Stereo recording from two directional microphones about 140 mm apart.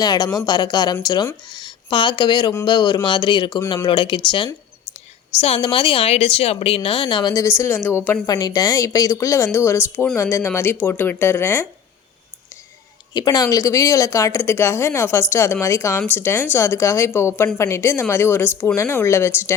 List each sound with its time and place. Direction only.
0.0 s speech: 30° left (ahead or behind)
8.3 s speech: 25° left (ahead or behind)
13.1 s speech: 30° left (ahead or behind)